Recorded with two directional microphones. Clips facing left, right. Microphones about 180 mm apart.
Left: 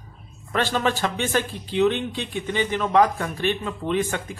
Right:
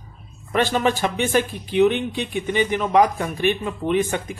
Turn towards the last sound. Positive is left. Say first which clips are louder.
# right 3 dB
turn(degrees=-15)  # may be behind; listen again after turning